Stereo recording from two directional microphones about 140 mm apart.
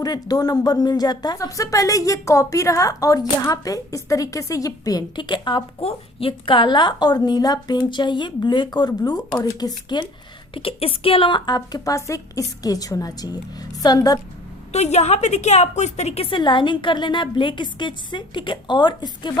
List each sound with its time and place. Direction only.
0.0 s speech: 30° left (ahead or behind)
10.5 s speech: 40° left (ahead or behind)
14.7 s a woman's voice: 50° left (ahead or behind); by 19.3 s 30° left (ahead or behind)